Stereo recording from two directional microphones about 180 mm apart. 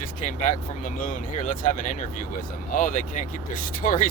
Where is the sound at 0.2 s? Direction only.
45° left (ahead or behind).